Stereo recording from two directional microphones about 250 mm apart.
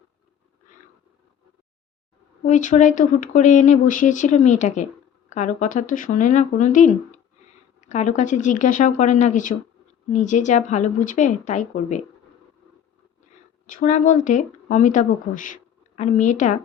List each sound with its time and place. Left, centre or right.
2.4 s speech: left
13.7 s speech: left